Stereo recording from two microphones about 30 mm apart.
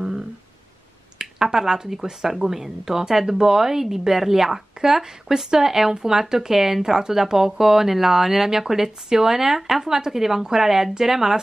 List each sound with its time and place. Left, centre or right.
1.1 s speech: centre